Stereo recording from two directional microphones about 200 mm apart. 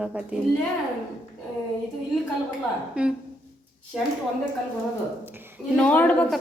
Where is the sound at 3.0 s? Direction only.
5° right (ahead or behind).